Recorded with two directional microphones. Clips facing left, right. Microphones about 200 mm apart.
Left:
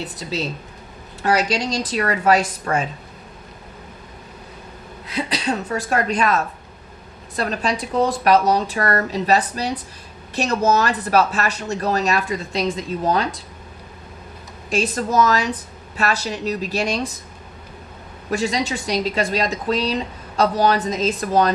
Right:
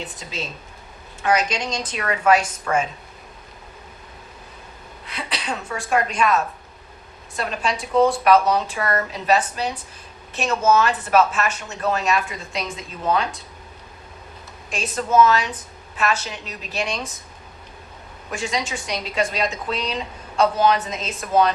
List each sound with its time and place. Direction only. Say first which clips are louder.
0.0 s speech: left 5 dB; 35° left (ahead or behind)
5.0 s a woman's voice: left 6 dB; 40° left (ahead or behind)
7.3 s speech: left 3 dB; 35° left (ahead or behind)
14.7 s speech: left 2 dB; 35° left (ahead or behind)
18.3 s speech: left 5 dB; 35° left (ahead or behind)